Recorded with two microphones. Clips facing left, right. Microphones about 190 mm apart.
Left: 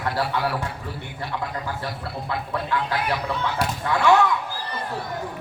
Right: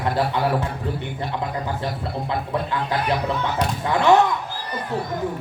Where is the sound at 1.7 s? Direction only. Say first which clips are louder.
Right 4 dB; 20° right (ahead or behind).